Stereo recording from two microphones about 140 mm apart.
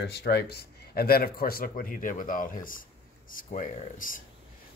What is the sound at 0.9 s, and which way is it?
Speech, 90° left.